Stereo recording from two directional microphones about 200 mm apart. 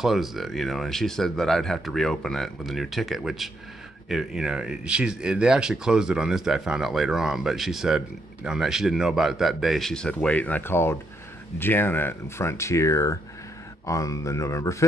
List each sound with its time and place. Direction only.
0.0 s speech: centre (ahead or behind); by 14.9 s 15° left (ahead or behind)